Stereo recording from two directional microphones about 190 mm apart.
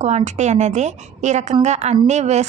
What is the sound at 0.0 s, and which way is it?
A woman's voice, 35° right (ahead or behind).